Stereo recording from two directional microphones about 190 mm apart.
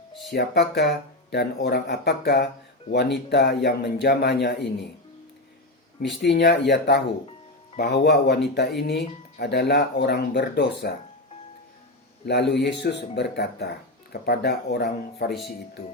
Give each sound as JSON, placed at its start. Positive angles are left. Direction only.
{"t": 0.3, "sound": "speech", "side_deg": 60}
{"t": 6.2, "sound": "speech", "side_deg": 65}
{"t": 12.2, "sound": "speech", "side_deg": 60}